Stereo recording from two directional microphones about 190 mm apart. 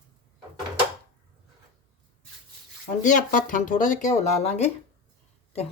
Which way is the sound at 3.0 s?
45° left (ahead or behind).